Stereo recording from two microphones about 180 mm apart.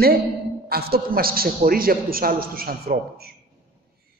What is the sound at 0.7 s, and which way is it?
A man's voice, 60° right (ahead or behind).